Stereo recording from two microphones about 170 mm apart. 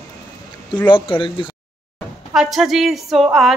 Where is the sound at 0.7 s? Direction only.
30° left (ahead or behind).